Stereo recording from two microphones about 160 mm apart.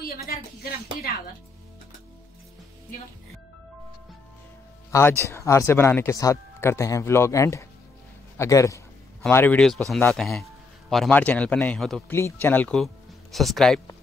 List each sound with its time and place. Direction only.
0.3 s a woman's voice: 75° left (ahead or behind)
4.9 s a man's voice: 15° left (ahead or behind)
12.1 s speech: 15° left (ahead or behind)